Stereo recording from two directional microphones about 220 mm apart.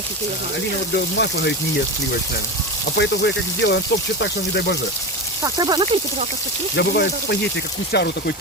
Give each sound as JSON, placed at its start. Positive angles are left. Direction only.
{"t": 0.9, "sound": "speech", "side_deg": 50}
{"t": 3.0, "sound": "speech", "side_deg": 50}
{"t": 5.4, "sound": "speech", "side_deg": -20}
{"t": 6.7, "sound": "speech", "side_deg": 50}